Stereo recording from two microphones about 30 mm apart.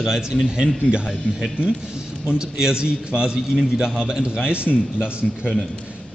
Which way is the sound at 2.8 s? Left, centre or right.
Right.